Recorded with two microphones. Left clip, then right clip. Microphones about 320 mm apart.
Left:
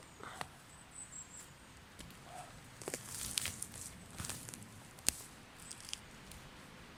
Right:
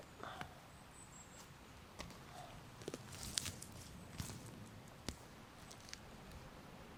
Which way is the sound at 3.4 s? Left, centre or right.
Centre.